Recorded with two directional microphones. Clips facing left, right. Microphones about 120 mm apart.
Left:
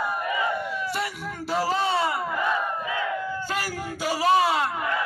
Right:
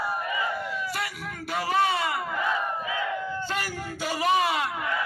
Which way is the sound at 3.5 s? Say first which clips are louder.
Left 2 dB; 40° left (ahead or behind).